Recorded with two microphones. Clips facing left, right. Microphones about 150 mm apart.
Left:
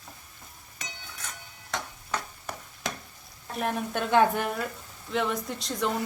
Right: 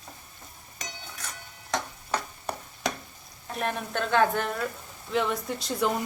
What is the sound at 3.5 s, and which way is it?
A woman's voice, 5° left (ahead or behind).